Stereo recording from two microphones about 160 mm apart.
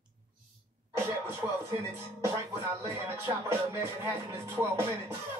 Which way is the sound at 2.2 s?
15° right (ahead or behind).